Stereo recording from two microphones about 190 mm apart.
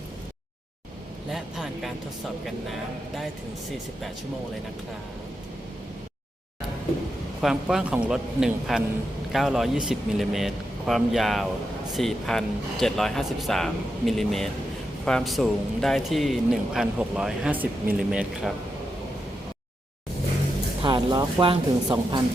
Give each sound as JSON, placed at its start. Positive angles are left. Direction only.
{"t": 1.3, "sound": "vehicle", "side_deg": 0}
{"t": 7.4, "sound": "speech", "side_deg": -5}
{"t": 20.8, "sound": "speech", "side_deg": -25}